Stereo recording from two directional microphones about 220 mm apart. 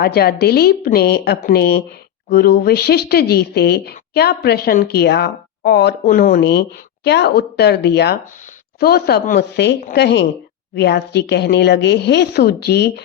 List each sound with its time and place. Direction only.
0.0 s speech: 45° left (ahead or behind)